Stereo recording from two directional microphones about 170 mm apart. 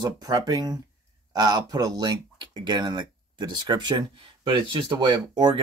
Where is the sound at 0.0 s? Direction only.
20° right (ahead or behind).